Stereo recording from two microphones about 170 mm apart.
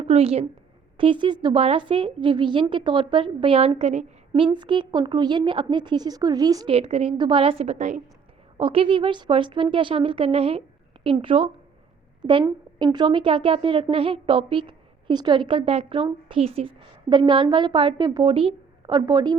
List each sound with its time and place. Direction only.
0.0 s a woman's voice: 35° right (ahead or behind)
4.3 s a woman's voice: 30° right (ahead or behind)
6.7 s a woman's voice: 35° right (ahead or behind)
8.5 s a woman's voice: 30° right (ahead or behind)